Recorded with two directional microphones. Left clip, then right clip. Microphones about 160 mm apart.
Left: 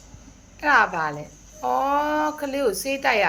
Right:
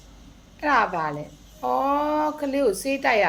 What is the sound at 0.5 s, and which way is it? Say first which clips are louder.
A woman's voice: left 2 dB; 25° right (ahead or behind).